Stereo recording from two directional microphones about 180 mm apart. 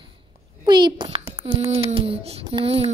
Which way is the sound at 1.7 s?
30° right (ahead or behind).